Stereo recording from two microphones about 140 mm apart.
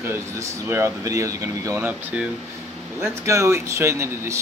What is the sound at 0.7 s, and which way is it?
Speech, 20° right (ahead or behind).